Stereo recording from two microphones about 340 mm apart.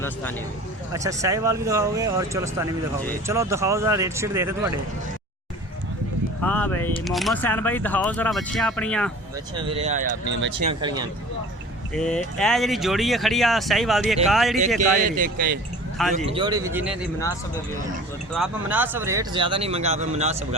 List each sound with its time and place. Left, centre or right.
0.0 s speech: centre
0.9 s speech: centre
6.4 s speech: centre
9.6 s speech: centre; by 10.5 s right
10.7 s speech: centre
11.9 s speech: centre
14.8 s speech: right; by 17.0 s centre
18.3 s speech: centre